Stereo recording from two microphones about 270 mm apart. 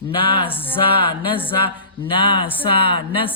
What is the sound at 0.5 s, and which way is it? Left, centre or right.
Speech, centre.